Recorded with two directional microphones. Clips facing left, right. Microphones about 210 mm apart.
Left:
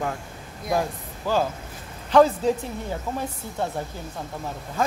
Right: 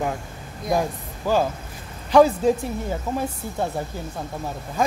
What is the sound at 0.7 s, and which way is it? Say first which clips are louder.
Speech: even; 15° right (ahead or behind).